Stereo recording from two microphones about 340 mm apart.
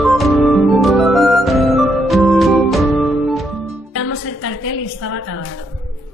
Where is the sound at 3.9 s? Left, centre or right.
Left.